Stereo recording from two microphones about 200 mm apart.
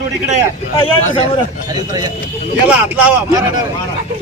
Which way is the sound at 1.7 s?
20° right (ahead or behind).